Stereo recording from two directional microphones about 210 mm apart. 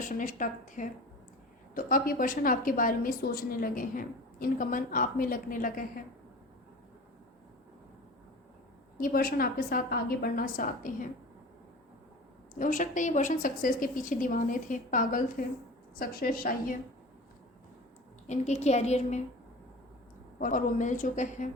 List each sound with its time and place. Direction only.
0.0 s a woman's voice: 40° left (ahead or behind)
9.0 s a woman's voice: 40° left (ahead or behind)
12.5 s a woman's voice: 40° left (ahead or behind)
18.3 s a woman's voice: 30° left (ahead or behind)
20.4 s a woman's voice: 40° left (ahead or behind)